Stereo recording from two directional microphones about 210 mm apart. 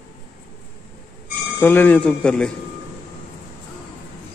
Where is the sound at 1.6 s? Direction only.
10° left (ahead or behind).